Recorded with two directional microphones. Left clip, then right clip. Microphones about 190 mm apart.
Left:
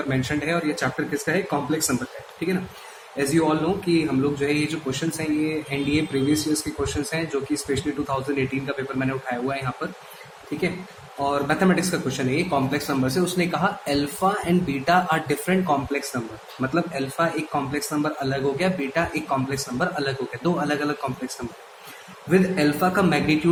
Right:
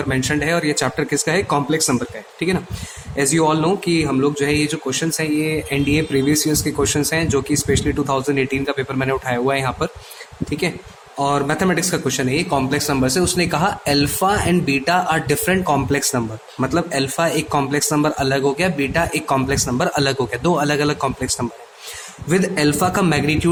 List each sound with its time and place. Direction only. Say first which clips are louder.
0.1 s speech: right 6 dB; 45° right (ahead or behind)
3.2 s speech: right 5 dB; 50° right (ahead or behind)
11.2 s speech: right 4 dB; 50° right (ahead or behind)
22.3 s speech: right 3 dB; 50° right (ahead or behind)